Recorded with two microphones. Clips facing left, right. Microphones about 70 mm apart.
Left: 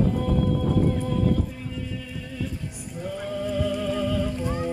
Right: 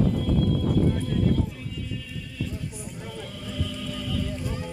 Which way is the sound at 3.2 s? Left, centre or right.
Left.